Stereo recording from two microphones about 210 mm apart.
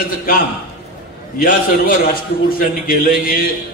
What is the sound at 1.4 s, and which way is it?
A man's voice, 45° left (ahead or behind).